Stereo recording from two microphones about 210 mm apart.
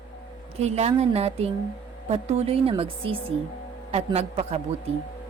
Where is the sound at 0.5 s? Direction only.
30° right (ahead or behind).